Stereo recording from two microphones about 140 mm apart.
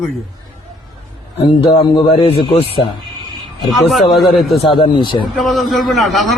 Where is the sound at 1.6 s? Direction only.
35° left (ahead or behind).